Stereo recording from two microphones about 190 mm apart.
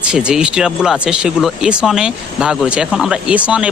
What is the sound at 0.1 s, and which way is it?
Speech, 5° right (ahead or behind).